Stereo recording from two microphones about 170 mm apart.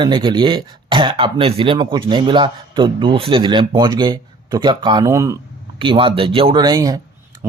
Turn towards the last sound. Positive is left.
turn(degrees=-20)  # may be behind; listen again after turning